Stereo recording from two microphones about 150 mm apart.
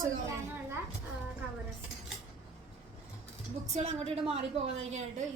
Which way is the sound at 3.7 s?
45° right (ahead or behind).